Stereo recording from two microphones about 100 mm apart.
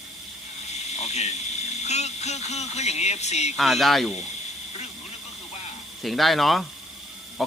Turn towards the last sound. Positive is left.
turn(degrees=0)  # may be behind; listen again after turning